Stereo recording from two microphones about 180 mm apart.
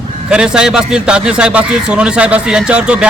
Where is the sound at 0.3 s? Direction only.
5° right (ahead or behind).